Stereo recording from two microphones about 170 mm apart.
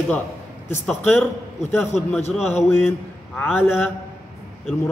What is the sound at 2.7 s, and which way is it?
A man's voice, 10° left (ahead or behind).